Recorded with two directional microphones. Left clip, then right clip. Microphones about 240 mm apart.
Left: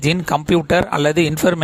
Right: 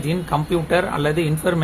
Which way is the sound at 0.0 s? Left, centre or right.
Left.